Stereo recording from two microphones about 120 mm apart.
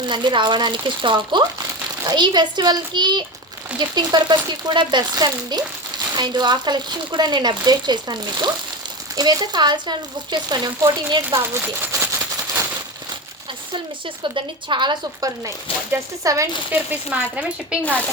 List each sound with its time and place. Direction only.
0.0 s speech: 40° right (ahead or behind)
11.5 s speech: 15° right (ahead or behind)
14.3 s speech: 40° right (ahead or behind)
15.4 s speech: 25° right (ahead or behind)
16.7 s speech: 10° right (ahead or behind)